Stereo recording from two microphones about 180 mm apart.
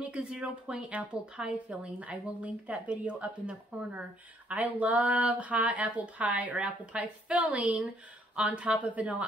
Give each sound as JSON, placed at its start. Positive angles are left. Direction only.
{"t": 0.0, "sound": "speech", "side_deg": -5}